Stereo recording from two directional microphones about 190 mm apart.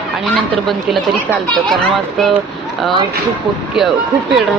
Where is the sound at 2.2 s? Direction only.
Centre (ahead or behind).